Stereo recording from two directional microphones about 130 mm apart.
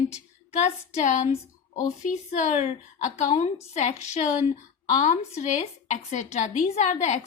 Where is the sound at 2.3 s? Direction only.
65° left (ahead or behind).